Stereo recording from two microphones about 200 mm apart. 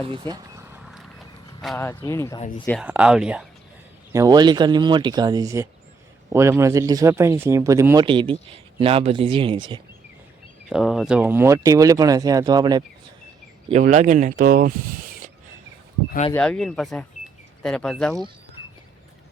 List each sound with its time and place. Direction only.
0.0 s speech: 25° right (ahead or behind)
0.8 s vehicle: centre (ahead or behind)
1.6 s speech: 10° left (ahead or behind)
2.8 s speech: 5° right (ahead or behind)
4.1 s speech: 20° right (ahead or behind)
10.7 s speech: 5° right (ahead or behind); by 12.8 s 20° right (ahead or behind)
13.7 s speech: 35° right (ahead or behind)
16.3 s speech: 5° left (ahead or behind)